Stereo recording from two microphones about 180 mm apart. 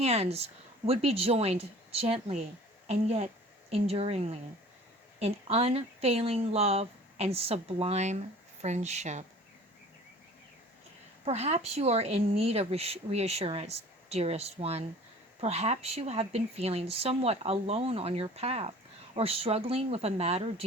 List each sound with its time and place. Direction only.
0.0 s speech: 35° right (ahead or behind)
11.3 s speech: 35° right (ahead or behind)